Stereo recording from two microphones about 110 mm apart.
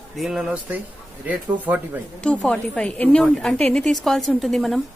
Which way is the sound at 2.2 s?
10° left (ahead or behind).